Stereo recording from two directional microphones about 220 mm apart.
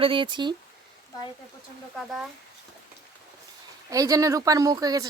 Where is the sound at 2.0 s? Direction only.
Centre (ahead or behind).